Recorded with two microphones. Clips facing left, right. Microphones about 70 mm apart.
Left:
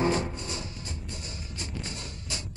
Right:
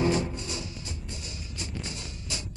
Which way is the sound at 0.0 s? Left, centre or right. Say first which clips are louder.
Right 1 dB; left.